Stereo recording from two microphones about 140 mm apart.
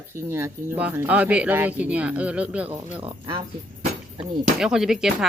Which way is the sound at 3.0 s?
40° right (ahead or behind).